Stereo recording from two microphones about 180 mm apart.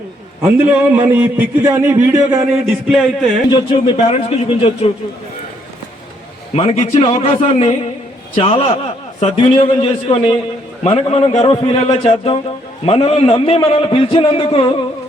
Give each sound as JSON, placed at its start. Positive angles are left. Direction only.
{"t": 0.7, "sound": "a man's voice", "side_deg": -10}
{"t": 2.5, "sound": "a man's voice", "side_deg": 0}
{"t": 3.5, "sound": "a man's voice", "side_deg": 30}
{"t": 6.6, "sound": "a man's voice", "side_deg": 30}